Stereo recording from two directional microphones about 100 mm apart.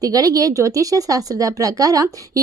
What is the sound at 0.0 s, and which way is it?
Speech, 35° right (ahead or behind).